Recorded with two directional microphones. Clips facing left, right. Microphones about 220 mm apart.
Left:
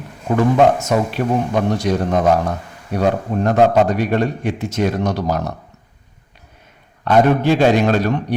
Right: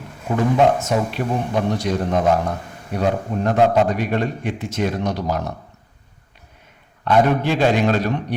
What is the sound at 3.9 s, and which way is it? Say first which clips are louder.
A man's voice: left 4 dB; 40° left (ahead or behind).